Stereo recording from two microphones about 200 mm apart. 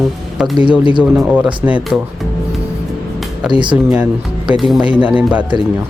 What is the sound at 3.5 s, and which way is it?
Speech, 25° right (ahead or behind).